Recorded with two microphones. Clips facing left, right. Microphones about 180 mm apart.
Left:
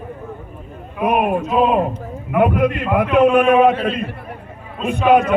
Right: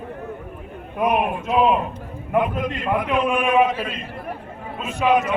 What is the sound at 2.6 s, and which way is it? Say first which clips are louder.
A man's voice: left 6 dB; 60° left (ahead or behind).